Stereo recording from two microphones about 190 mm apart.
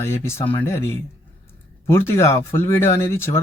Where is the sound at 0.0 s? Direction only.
15° left (ahead or behind).